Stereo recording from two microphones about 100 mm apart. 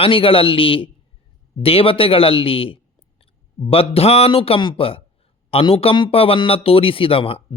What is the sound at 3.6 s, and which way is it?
Speech, 80° left.